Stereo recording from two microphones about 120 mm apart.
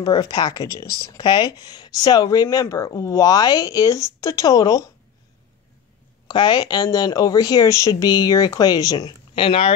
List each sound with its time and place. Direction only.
0.0 s speech: 35° left (ahead or behind)
6.2 s speech: 40° left (ahead or behind)
9.3 s speech: 50° left (ahead or behind)